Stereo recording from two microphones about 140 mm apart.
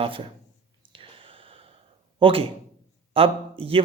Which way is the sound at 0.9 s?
40° right (ahead or behind).